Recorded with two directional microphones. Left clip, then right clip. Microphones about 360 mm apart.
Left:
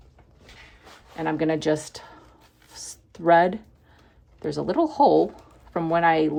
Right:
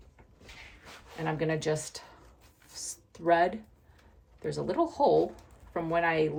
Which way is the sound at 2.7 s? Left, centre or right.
Centre.